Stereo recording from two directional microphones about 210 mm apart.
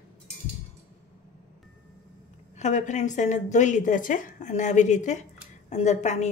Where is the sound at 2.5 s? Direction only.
35° left (ahead or behind).